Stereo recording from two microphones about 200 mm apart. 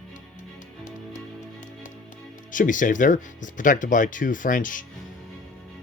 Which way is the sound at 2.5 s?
40° left (ahead or behind).